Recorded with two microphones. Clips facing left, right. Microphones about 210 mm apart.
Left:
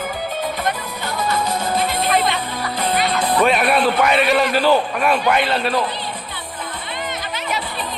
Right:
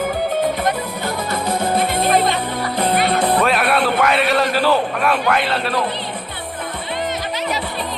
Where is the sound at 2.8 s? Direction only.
55° right (ahead or behind).